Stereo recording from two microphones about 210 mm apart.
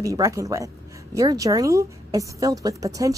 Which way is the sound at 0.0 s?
15° right (ahead or behind).